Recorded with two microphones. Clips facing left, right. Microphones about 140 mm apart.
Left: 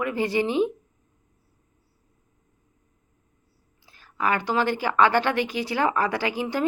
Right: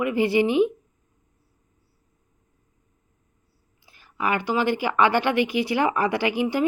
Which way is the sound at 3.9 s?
15° right (ahead or behind).